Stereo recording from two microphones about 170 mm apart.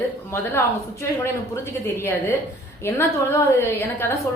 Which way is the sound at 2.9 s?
15° left (ahead or behind).